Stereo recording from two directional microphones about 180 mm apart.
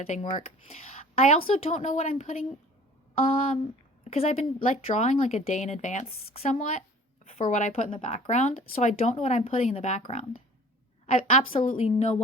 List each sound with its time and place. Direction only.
0.0 s a woman's voice: 35° left (ahead or behind)
11.0 s a woman's voice: 40° left (ahead or behind)